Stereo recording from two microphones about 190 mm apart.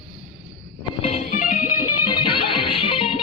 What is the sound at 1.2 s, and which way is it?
Music, 45° left (ahead or behind).